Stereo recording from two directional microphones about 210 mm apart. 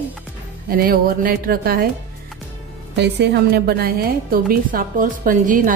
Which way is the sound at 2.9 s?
55° right (ahead or behind).